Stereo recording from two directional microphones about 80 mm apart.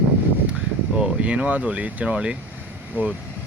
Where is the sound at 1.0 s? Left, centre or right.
Centre.